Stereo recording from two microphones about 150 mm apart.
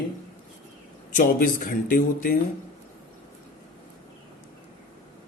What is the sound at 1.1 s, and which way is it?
Speech, 65° left (ahead or behind).